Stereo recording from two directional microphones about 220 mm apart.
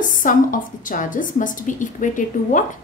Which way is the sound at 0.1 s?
35° left (ahead or behind).